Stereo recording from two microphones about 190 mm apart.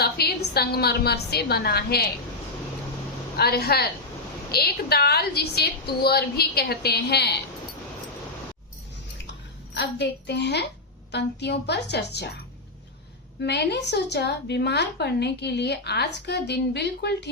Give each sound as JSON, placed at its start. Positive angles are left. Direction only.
{"t": 0.0, "sound": "a woman's voice", "side_deg": 55}
{"t": 3.3, "sound": "a woman's voice", "side_deg": 55}
{"t": 9.7, "sound": "a woman's voice", "side_deg": 65}
{"t": 13.4, "sound": "a woman's voice", "side_deg": 60}